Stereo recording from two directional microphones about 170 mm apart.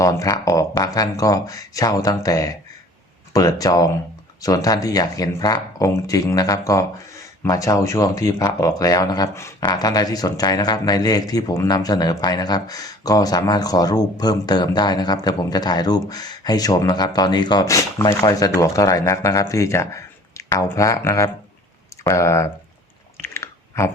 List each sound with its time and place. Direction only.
0.0 s speech: 20° left (ahead or behind)
23.2 s chewing: 15° left (ahead or behind)